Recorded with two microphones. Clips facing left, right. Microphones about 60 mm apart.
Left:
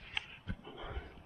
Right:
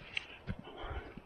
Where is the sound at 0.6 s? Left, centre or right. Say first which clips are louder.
Right 1 dB; centre.